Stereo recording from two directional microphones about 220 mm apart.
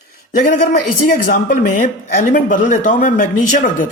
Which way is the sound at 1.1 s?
35° left (ahead or behind).